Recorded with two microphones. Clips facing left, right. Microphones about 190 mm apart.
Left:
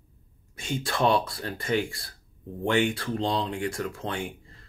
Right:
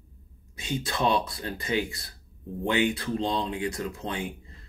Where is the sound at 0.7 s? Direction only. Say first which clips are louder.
Left 2 dB; 15° right (ahead or behind).